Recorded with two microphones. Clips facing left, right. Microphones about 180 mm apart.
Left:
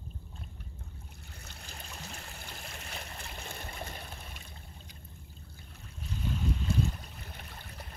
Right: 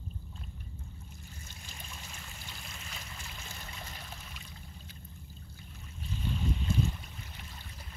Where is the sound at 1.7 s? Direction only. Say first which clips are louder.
Left 4 dB; 60° left (ahead or behind).